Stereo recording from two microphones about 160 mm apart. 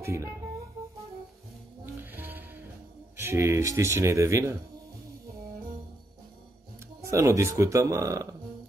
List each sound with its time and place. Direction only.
0.0 s a sound: 20° right (ahead or behind)
2.1 s music: 15° right (ahead or behind)
3.2 s speech: 15° right (ahead or behind)
7.0 s speech: 20° right (ahead or behind)